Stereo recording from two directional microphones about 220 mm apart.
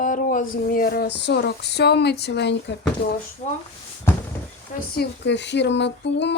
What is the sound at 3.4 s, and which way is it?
Speech, 35° left (ahead or behind).